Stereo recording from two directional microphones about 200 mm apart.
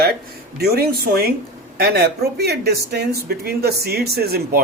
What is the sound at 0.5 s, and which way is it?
Speech, 50° right (ahead or behind).